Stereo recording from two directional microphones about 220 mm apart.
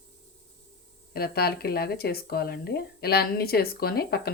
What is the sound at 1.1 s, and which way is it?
Speech, 45° left (ahead or behind).